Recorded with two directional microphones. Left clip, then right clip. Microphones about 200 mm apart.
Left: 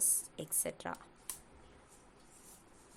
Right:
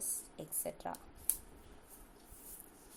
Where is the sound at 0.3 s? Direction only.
25° left (ahead or behind).